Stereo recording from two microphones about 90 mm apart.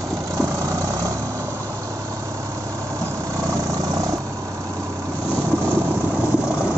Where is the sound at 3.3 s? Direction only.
35° right (ahead or behind).